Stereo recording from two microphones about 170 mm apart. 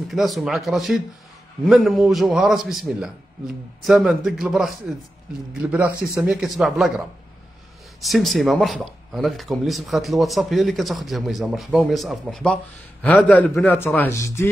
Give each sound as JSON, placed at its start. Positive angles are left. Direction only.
{"t": 0.1, "sound": "speech", "side_deg": 0}
{"t": 8.0, "sound": "a man's voice", "side_deg": 0}